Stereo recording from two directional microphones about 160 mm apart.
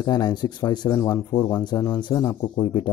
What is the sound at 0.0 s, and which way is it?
Speech, 25° left (ahead or behind).